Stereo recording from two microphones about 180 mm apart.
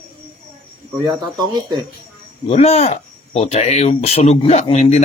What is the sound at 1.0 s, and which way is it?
Speech, 20° right (ahead or behind).